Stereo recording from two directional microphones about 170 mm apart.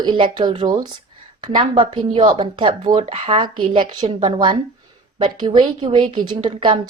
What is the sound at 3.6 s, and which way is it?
A woman's voice, 30° right (ahead or behind).